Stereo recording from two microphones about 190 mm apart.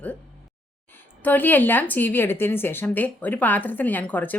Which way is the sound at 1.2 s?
10° left (ahead or behind).